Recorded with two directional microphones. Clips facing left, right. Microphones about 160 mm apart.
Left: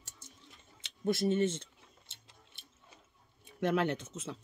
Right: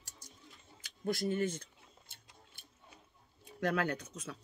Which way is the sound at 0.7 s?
25° left (ahead or behind).